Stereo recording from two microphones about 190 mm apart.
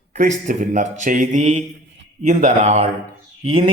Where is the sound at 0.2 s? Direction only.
40° right (ahead or behind).